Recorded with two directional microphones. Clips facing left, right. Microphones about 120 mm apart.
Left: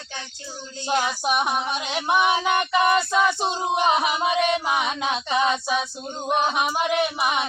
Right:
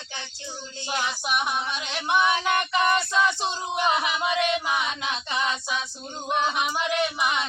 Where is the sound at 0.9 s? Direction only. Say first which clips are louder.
Left 6 dB; 30° left (ahead or behind).